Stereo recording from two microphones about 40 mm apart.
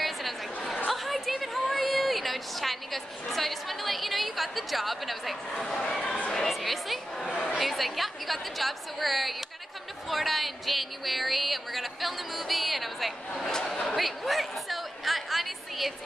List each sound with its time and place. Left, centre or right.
0.9 s a sound: centre
5.5 s speech: centre
6.3 s chatter: centre
7.5 s speech: centre
13.4 s speech: centre
13.9 s a sound: centre